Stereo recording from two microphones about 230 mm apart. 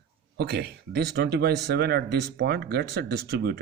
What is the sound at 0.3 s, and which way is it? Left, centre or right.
Speech, right.